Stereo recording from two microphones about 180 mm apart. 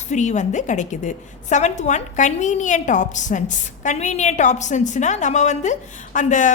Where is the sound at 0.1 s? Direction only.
40° left (ahead or behind).